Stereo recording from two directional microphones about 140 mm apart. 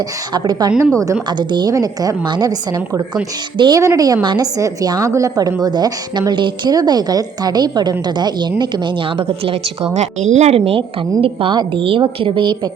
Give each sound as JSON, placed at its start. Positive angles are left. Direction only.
{"t": 0.3, "sound": "a woman's voice", "side_deg": -30}